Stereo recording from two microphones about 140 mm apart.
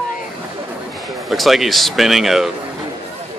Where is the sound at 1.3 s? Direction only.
Centre (ahead or behind).